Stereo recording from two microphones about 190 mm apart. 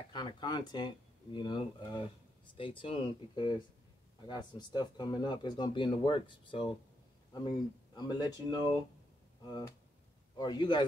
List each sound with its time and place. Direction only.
0.1 s speech: 25° left (ahead or behind)
10.3 s speech: 20° left (ahead or behind)